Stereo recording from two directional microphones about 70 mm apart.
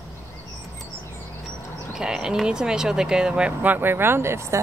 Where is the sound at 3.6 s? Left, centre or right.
Right.